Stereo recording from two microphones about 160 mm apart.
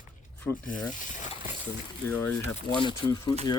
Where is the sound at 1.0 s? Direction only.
50° left (ahead or behind).